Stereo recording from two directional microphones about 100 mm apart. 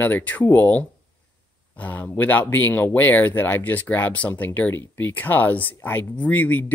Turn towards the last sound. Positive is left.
turn(degrees=15)  # may be behind; listen again after turning